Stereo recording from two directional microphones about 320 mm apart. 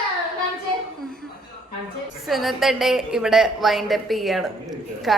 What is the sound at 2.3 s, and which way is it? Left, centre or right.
A woman's voice, centre.